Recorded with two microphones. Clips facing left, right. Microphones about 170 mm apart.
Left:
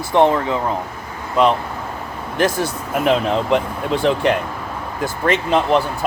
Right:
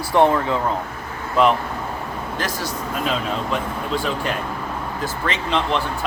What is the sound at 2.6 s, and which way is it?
Speech, 70° left (ahead or behind).